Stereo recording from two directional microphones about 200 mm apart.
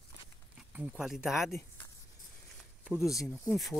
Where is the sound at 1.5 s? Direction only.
15° left (ahead or behind).